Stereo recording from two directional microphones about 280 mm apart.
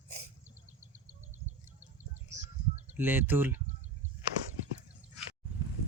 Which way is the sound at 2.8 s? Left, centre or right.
Centre.